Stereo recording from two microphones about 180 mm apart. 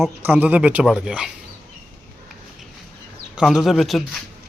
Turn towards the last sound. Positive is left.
turn(degrees=0)  # may be behind; listen again after turning